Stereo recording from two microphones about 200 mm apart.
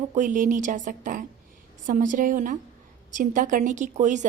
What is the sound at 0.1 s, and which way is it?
A woman's voice, 40° right (ahead or behind).